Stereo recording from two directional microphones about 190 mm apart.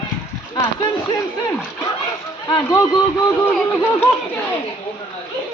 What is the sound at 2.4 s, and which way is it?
Speech, 20° left (ahead or behind).